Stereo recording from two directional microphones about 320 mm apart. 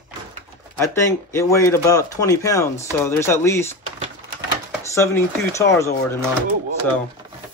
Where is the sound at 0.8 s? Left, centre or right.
Centre.